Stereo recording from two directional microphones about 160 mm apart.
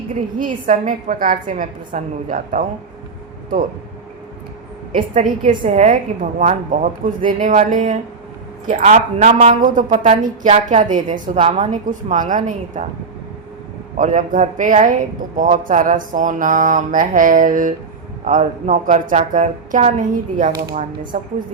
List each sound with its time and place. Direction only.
0.3 s mantra: 55° right (ahead or behind)
4.9 s mantra: 55° right (ahead or behind)
5.6 s a woman's voice: 45° right (ahead or behind)
10.0 s a woman's voice: 40° right (ahead or behind)
11.3 s a woman's voice: 40° right (ahead or behind)
13.9 s a woman's voice: 50° right (ahead or behind)
15.4 s mantra: 55° right (ahead or behind)
18.3 s a woman's voice: 50° right (ahead or behind)
20.7 s mantra: 55° right (ahead or behind)